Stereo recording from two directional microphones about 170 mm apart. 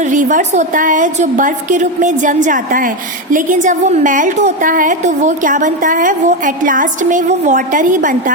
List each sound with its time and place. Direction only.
0.0 s a woman's voice: 50° right (ahead or behind)